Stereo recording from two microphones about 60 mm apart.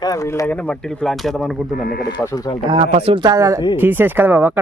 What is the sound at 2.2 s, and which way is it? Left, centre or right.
Speech, left.